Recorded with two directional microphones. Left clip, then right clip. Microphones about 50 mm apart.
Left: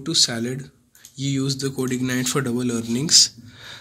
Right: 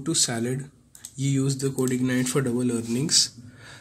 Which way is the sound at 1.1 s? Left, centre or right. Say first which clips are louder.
Left 2 dB; right.